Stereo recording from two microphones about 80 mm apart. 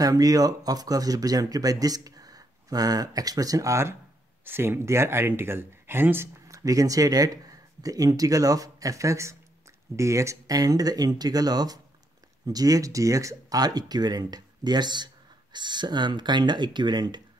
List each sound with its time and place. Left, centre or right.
0.0 s speech: right
6.5 s speech: right